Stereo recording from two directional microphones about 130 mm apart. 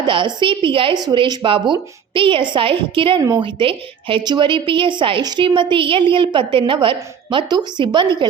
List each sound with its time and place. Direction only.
0.0 s a woman's voice: 35° right (ahead or behind)